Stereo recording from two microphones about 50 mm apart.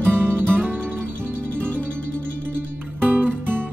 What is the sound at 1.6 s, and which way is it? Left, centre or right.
Music, left.